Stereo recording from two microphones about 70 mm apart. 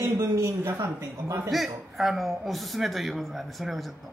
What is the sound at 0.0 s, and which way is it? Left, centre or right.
A man's voice, right.